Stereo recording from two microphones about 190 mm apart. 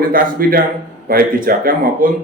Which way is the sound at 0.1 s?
50° right (ahead or behind).